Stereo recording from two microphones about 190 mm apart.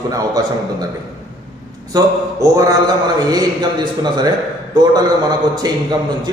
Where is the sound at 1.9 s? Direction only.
20° right (ahead or behind).